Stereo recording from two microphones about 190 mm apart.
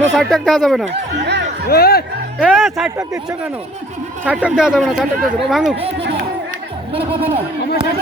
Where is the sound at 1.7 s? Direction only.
55° left (ahead or behind).